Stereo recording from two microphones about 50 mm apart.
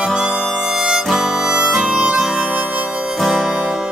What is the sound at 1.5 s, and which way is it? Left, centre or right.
Harmonica, centre.